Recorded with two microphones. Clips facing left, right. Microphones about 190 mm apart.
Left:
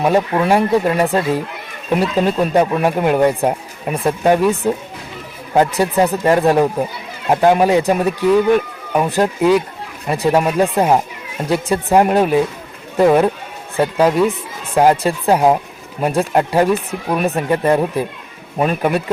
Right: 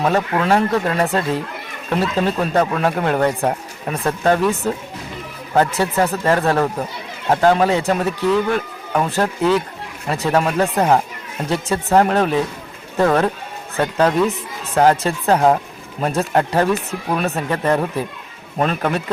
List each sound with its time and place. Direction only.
0.0 s speech: 15° left (ahead or behind)